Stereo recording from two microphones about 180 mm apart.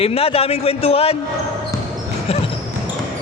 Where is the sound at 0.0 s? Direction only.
35° left (ahead or behind).